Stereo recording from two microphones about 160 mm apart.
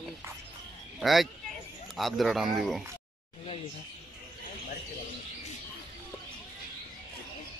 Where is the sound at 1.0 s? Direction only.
Centre (ahead or behind).